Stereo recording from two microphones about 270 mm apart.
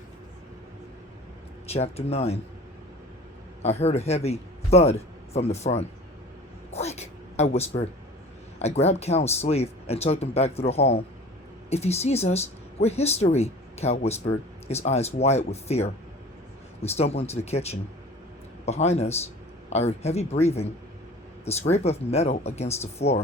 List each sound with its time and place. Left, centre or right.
1.6 s speech: left
3.6 s a man's voice: left
6.7 s a sound: left
8.5 s speech: left